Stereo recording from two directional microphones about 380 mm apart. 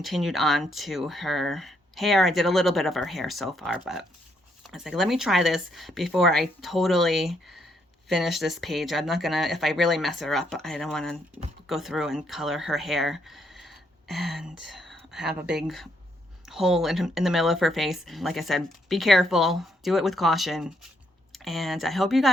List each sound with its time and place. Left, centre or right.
0.0 s speech: centre